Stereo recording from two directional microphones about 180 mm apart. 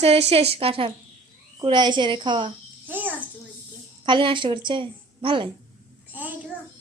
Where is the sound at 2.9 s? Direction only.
10° right (ahead or behind).